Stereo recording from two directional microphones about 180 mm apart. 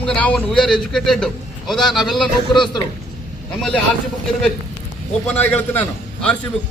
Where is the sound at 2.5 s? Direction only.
25° left (ahead or behind).